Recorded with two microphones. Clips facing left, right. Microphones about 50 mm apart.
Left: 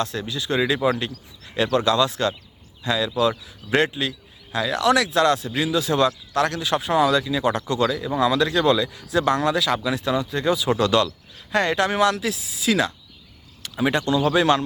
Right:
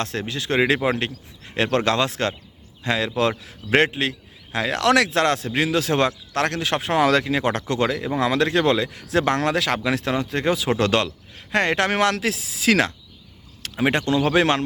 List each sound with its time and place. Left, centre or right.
0.0 s speech: right
4.8 s speech: right
7.8 s speech: right
13.7 s speech: right